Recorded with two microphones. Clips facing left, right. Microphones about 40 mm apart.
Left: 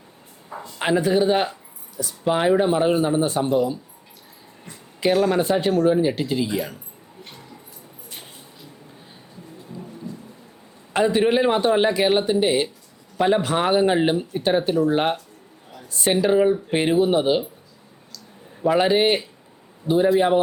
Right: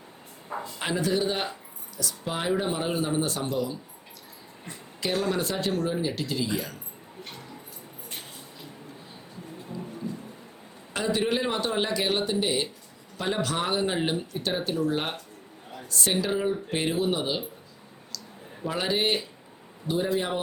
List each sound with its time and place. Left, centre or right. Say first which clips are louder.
0.5 s speech: right 1 dB; centre
0.8 s speech: left 8 dB; left
4.9 s speech: left 8 dB; left
9.7 s thunder: even; left
10.9 s speech: left 8 dB; left
18.6 s speech: left 9 dB; left